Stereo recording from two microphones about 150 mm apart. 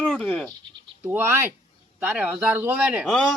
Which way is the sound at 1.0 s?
15° right (ahead or behind).